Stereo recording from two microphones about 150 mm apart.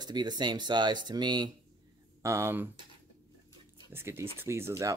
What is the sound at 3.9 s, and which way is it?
Speech, 15° right (ahead or behind).